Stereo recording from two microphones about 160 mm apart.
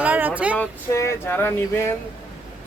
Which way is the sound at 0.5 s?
15° left (ahead or behind).